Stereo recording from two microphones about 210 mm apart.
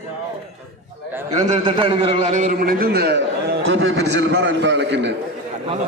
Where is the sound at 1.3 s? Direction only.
30° right (ahead or behind); by 5.2 s 55° right (ahead or behind).